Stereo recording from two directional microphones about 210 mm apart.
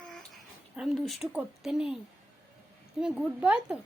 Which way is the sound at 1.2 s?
5° right (ahead or behind).